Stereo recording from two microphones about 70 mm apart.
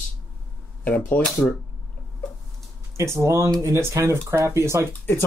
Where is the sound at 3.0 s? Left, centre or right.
Right.